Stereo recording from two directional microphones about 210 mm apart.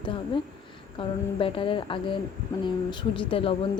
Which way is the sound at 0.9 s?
25° left (ahead or behind).